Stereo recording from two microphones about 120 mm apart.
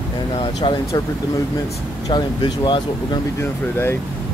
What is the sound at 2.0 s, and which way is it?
Speech, 40° left (ahead or behind).